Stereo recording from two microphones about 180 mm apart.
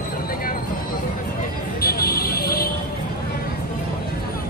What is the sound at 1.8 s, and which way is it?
Vehicle, 60° left (ahead or behind).